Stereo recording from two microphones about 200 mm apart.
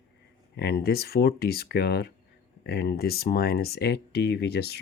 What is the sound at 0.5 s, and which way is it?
Speech, 55° left (ahead or behind).